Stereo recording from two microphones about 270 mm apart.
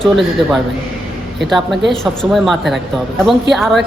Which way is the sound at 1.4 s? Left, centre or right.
Centre.